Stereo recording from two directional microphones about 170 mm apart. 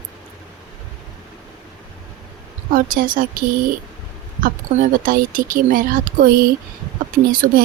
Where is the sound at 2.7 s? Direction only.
55° right (ahead or behind).